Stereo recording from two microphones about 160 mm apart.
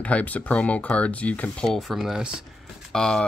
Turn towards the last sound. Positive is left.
turn(degrees=5)  # may be behind; listen again after turning